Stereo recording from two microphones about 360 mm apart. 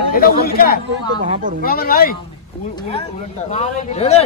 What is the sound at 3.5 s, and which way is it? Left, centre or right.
Speech, centre.